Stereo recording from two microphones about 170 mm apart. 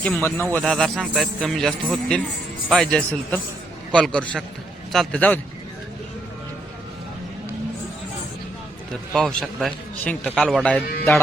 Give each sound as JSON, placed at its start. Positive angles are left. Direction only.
{"t": 0.0, "sound": "a man's voice", "side_deg": 10}
{"t": 9.1, "sound": "a man's voice", "side_deg": 0}